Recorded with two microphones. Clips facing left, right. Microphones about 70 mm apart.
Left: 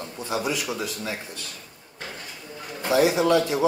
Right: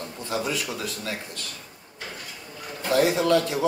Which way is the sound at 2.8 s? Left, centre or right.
Centre.